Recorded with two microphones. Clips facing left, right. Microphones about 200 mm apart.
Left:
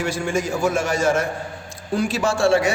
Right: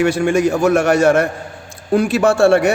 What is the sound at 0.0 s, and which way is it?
A man's voice, 65° right (ahead or behind).